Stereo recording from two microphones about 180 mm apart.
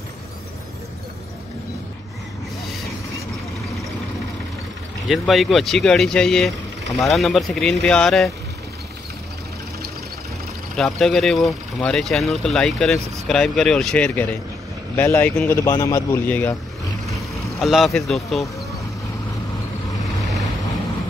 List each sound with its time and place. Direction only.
5.0 s speech: centre (ahead or behind)
10.8 s speech: centre (ahead or behind)
17.0 s vehicle: centre (ahead or behind)